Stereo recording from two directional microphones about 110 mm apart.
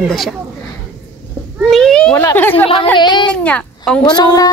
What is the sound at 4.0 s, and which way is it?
Speech, 40° left (ahead or behind).